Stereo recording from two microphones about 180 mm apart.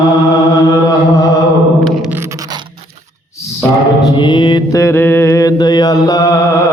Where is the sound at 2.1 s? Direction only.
15° right (ahead or behind).